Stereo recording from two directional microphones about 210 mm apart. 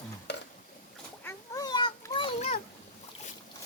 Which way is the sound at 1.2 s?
15° left (ahead or behind).